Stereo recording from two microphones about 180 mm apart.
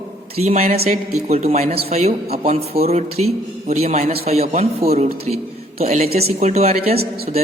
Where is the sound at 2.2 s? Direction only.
60° right (ahead or behind).